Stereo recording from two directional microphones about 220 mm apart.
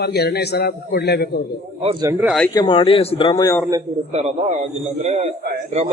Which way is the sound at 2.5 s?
20° left (ahead or behind).